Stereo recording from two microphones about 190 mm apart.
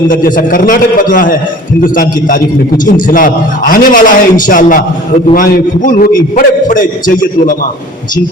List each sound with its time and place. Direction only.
0.1 s a man's voice: 45° left (ahead or behind)